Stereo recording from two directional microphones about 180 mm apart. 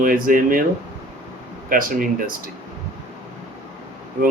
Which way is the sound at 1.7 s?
50° right (ahead or behind).